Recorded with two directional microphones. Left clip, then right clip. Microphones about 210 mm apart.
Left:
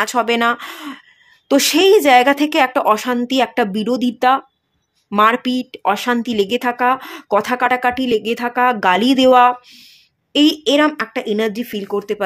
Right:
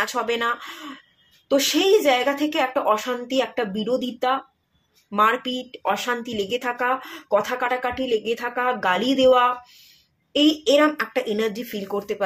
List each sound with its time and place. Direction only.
0.0 s speech: 50° left (ahead or behind)